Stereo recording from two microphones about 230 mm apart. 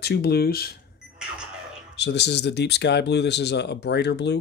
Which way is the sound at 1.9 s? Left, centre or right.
Left.